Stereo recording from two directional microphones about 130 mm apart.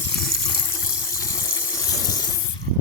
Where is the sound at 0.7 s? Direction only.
25° left (ahead or behind).